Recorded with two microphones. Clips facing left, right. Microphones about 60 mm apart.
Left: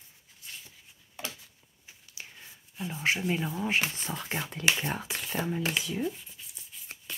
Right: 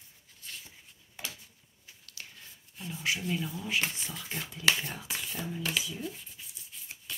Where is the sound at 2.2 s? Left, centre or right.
Centre.